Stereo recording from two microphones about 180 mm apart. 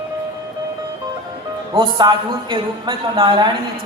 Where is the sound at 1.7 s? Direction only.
25° right (ahead or behind).